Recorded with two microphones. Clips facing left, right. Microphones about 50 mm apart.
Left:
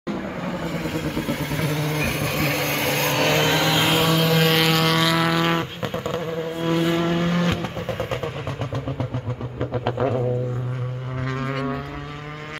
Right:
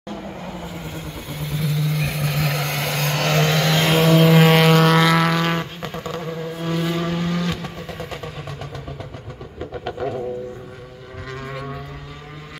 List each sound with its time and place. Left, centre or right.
0.8 s vehicle: left; by 3.8 s centre
3.8 s vehicle: centre
5.4 s vehicle: centre; by 8.3 s left
9.6 s vehicle: left